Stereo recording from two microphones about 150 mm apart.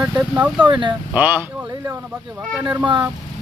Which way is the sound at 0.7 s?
30° right (ahead or behind).